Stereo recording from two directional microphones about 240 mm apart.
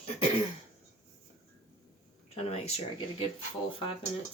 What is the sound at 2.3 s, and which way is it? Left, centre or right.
Speech, left.